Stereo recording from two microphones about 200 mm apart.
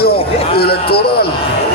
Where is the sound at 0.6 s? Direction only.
50° left (ahead or behind).